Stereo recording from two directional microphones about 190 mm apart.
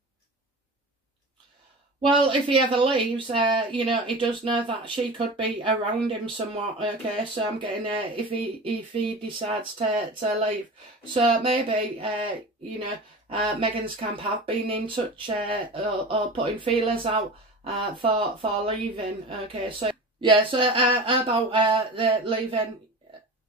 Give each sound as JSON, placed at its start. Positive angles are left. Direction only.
{"t": 2.0, "sound": "speech", "side_deg": -25}